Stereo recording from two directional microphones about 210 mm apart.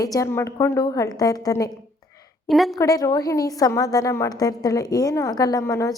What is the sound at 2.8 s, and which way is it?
A woman's voice, 15° left (ahead or behind).